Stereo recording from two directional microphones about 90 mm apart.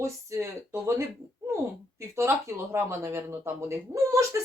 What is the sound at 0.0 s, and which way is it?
Speech, 35° right (ahead or behind).